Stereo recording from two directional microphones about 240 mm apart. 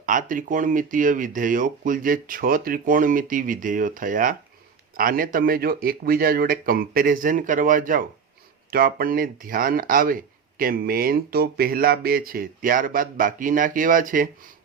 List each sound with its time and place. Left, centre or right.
0.0 s speech: right